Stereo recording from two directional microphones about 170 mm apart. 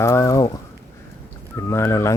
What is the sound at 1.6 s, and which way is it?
Speech, 15° left (ahead or behind).